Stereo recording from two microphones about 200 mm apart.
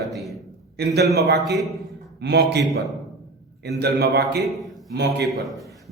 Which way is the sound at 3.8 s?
55° right (ahead or behind).